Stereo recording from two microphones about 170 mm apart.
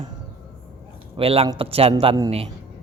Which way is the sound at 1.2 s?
35° right (ahead or behind).